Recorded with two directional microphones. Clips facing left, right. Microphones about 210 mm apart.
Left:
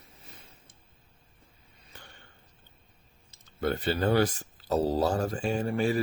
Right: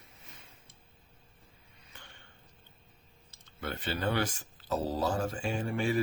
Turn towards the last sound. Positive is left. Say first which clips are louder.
# left 4 dB
turn(degrees=40)  # may be behind; listen again after turning